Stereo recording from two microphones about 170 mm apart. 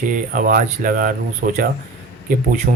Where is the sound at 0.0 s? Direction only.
55° right (ahead or behind).